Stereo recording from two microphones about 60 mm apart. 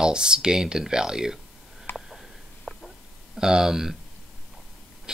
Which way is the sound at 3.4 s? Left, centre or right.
Centre.